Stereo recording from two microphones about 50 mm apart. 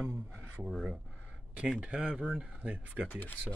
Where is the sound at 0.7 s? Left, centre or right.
Centre.